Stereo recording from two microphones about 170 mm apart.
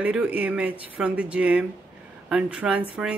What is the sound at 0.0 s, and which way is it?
Speech, 10° right (ahead or behind).